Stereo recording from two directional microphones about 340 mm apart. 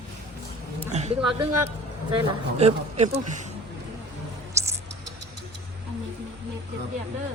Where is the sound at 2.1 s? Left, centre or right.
Centre.